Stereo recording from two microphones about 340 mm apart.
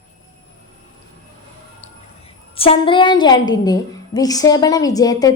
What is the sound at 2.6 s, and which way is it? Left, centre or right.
A woman's voice, centre.